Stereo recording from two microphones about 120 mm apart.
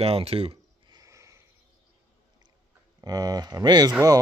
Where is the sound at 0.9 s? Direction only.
30° right (ahead or behind).